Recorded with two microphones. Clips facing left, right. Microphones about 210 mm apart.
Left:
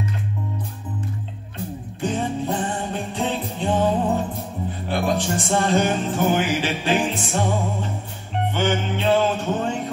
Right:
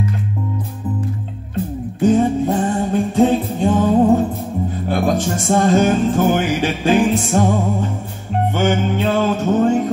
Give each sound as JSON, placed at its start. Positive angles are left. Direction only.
{"t": 2.0, "sound": "music", "side_deg": -45}